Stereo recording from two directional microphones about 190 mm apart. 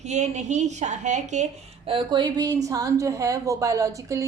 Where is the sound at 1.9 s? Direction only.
25° right (ahead or behind).